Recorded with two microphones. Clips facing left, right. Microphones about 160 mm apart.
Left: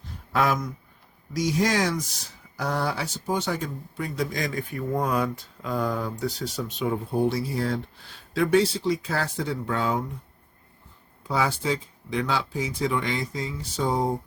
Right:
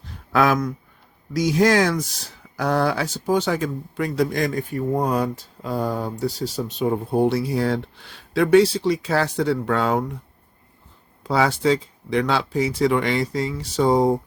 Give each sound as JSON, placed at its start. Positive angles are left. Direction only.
{"t": 0.3, "sound": "speech", "side_deg": -90}
{"t": 4.5, "sound": "speech", "side_deg": -40}
{"t": 7.1, "sound": "speech", "side_deg": -65}
{"t": 11.2, "sound": "speech", "side_deg": -75}